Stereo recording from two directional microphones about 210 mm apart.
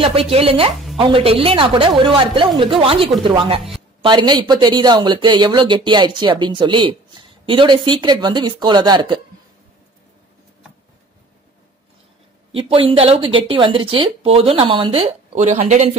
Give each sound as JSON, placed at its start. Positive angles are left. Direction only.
{"t": 0.0, "sound": "speech", "side_deg": -25}
{"t": 12.5, "sound": "speech", "side_deg": -25}